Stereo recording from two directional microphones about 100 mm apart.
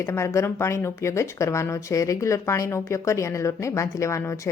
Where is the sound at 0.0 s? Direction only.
25° left (ahead or behind).